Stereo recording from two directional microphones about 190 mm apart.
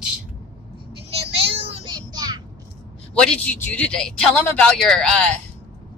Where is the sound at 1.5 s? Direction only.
30° right (ahead or behind).